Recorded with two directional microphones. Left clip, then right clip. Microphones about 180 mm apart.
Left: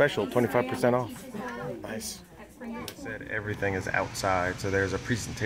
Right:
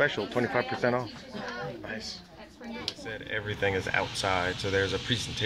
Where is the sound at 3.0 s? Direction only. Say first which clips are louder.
Left 3 dB; centre (ahead or behind).